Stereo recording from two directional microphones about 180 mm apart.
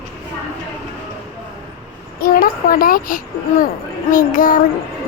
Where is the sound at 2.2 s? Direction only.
50° left (ahead or behind).